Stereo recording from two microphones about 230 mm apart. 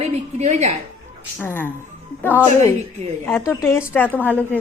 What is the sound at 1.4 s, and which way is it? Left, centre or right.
A woman's voice, centre.